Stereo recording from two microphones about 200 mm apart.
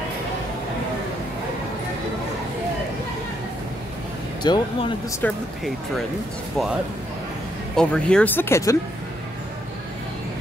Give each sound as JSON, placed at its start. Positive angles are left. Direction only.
{"t": 4.4, "sound": "speech", "side_deg": 20}
{"t": 5.2, "sound": "speech", "side_deg": 0}
{"t": 7.7, "sound": "speech", "side_deg": 5}